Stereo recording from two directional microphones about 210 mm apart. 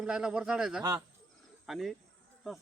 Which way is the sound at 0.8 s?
15° right (ahead or behind).